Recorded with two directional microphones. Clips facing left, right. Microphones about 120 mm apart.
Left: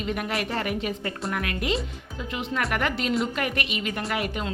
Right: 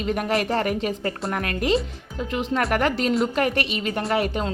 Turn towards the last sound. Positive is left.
turn(degrees=-35)  # may be behind; listen again after turning